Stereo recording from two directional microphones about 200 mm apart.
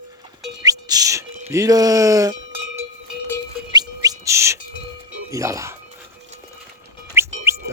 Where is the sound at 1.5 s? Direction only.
15° right (ahead or behind).